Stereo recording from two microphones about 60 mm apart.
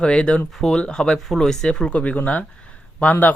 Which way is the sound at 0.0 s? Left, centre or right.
Centre.